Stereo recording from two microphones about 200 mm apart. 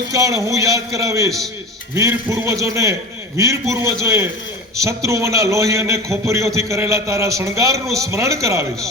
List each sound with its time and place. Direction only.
0.1 s a man's voice: 15° right (ahead or behind)